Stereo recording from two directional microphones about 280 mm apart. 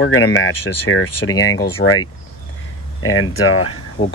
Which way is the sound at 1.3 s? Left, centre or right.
Centre.